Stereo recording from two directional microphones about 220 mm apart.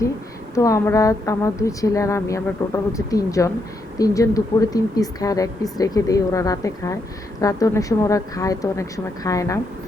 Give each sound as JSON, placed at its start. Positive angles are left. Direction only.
{"t": 0.5, "sound": "a woman's voice", "side_deg": 15}